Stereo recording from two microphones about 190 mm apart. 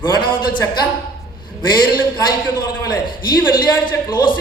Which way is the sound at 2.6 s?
20° left (ahead or behind).